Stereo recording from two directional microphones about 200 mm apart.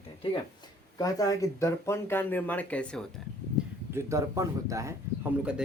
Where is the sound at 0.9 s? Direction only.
15° left (ahead or behind).